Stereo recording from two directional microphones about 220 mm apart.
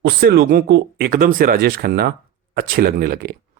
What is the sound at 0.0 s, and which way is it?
Speech, 45° right (ahead or behind).